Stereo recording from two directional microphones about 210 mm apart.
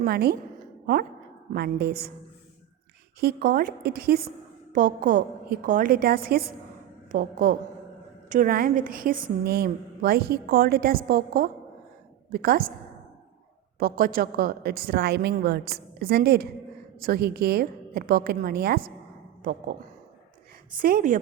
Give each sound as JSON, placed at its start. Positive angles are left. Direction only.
{"t": 0.0, "sound": "a woman's voice", "side_deg": -50}
{"t": 3.2, "sound": "a woman's voice", "side_deg": -45}
{"t": 13.7, "sound": "a woman's voice", "side_deg": -45}
{"t": 20.7, "sound": "a woman's voice", "side_deg": -40}